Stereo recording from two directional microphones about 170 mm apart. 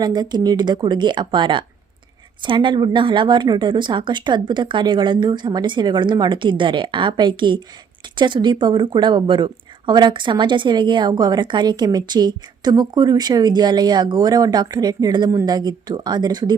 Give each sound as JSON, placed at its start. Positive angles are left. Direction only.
{"t": 0.0, "sound": "speech", "side_deg": -25}